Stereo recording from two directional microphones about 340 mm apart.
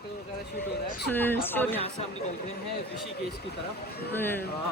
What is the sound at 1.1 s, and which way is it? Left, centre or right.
Speech, centre.